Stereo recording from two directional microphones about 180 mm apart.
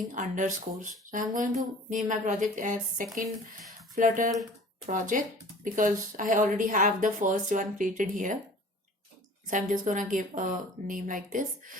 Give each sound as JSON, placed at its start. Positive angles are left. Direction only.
{"t": 0.1, "sound": "speech", "side_deg": -45}
{"t": 9.5, "sound": "speech", "side_deg": -45}